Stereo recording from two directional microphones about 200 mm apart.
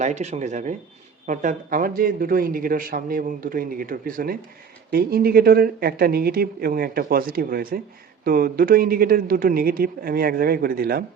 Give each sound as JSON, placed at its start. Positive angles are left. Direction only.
{"t": 0.0, "sound": "a man's voice", "side_deg": -35}